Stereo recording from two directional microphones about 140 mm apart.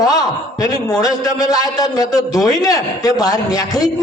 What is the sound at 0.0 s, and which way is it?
A man's voice, 25° left (ahead or behind).